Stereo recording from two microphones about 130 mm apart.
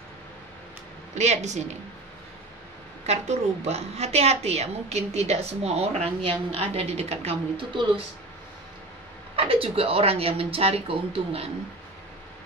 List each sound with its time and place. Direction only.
1.1 s a woman's voice: 60° right (ahead or behind)
3.1 s a woman's voice: 55° right (ahead or behind)
9.4 s speech: 45° right (ahead or behind)